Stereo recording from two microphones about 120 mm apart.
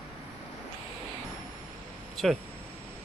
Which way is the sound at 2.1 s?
Centre (ahead or behind).